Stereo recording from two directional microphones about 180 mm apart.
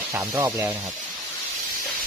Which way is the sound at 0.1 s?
15° right (ahead or behind).